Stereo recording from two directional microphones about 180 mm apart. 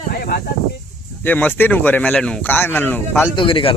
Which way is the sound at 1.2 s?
10° left (ahead or behind).